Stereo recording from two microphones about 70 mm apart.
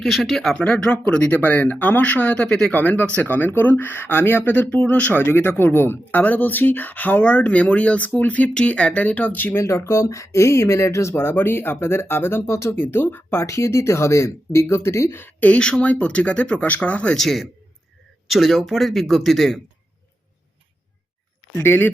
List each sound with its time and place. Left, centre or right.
0.0 s a man's voice: centre
0.5 s speech: centre
2.7 s speech: left
9.6 s speech: left
15.2 s speech: left
17.2 s a man's voice: centre
21.6 s speech: left